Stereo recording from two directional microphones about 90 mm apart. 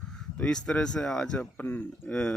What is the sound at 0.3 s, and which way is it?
A man's voice, 10° left (ahead or behind).